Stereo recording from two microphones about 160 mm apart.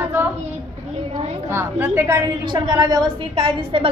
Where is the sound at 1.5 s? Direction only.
15° right (ahead or behind); by 3.9 s 35° right (ahead or behind).